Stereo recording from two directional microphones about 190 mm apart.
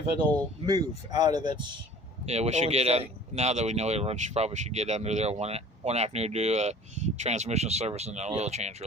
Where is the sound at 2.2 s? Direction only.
35° right (ahead or behind).